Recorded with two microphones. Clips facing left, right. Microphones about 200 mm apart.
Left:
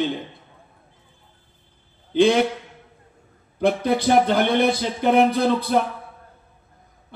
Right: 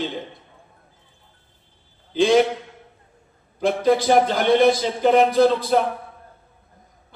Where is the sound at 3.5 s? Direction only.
60° left (ahead or behind).